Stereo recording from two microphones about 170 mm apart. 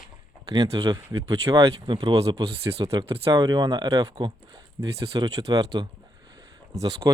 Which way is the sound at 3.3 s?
20° right (ahead or behind).